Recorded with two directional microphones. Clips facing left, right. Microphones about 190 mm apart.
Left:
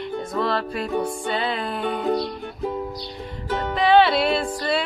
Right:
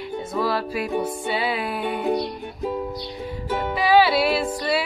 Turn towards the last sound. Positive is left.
turn(degrees=-5)  # may be behind; listen again after turning